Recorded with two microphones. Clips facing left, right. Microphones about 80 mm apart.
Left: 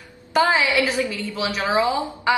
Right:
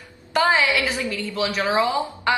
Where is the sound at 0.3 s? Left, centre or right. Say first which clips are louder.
Even; centre.